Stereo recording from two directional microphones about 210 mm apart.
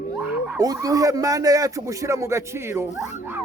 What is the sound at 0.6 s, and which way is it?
Speech, 15° right (ahead or behind).